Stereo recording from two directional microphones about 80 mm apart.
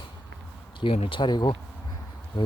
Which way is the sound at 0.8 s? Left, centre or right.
Left.